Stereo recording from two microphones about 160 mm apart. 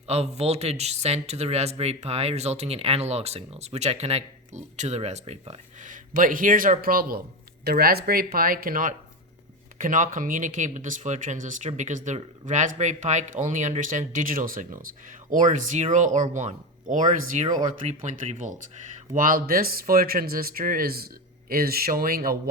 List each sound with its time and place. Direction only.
0.1 s speech: 40° right (ahead or behind); by 22.4 s 65° right (ahead or behind)